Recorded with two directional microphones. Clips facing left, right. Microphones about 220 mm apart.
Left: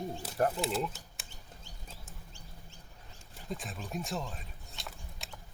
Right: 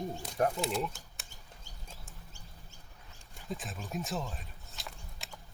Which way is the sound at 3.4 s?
Centre (ahead or behind).